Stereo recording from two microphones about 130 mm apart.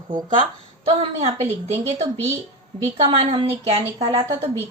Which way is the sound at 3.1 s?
45° right (ahead or behind).